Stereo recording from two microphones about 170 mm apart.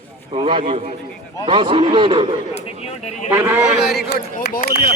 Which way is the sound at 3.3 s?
15° right (ahead or behind).